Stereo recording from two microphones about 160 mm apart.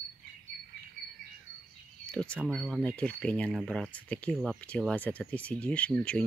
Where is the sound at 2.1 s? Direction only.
5° left (ahead or behind).